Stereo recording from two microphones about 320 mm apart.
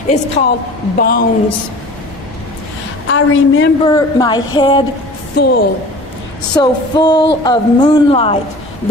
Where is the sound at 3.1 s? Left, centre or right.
Left.